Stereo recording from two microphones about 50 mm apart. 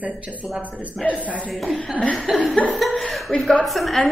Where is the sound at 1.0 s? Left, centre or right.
Centre.